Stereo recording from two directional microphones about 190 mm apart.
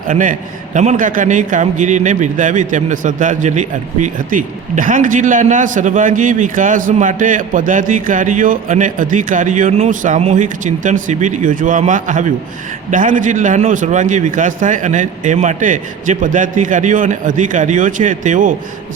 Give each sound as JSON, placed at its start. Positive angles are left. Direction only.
{"t": 0.1, "sound": "a man's voice", "side_deg": -45}